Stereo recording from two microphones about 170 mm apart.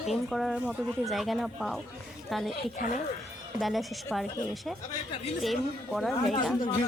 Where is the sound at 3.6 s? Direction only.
Centre (ahead or behind).